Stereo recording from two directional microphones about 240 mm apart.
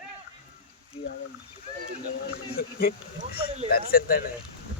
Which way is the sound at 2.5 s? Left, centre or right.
Left.